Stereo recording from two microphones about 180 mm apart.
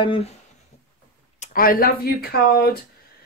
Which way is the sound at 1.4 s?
55° left (ahead or behind).